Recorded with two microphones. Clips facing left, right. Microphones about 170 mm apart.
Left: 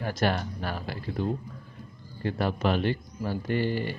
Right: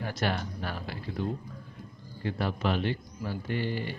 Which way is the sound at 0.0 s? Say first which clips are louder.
Left 4 dB; 45° left (ahead or behind).